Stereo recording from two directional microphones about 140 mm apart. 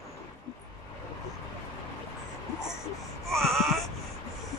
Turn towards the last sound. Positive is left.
turn(degrees=0)  # may be behind; listen again after turning